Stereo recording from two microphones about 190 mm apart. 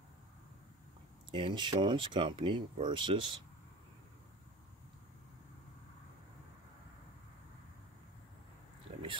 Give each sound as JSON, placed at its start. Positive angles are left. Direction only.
{"t": 1.3, "sound": "speech", "side_deg": -25}
{"t": 8.9, "sound": "biting", "side_deg": -30}